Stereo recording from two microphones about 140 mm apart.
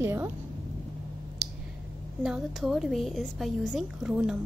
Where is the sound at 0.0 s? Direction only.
15° right (ahead or behind).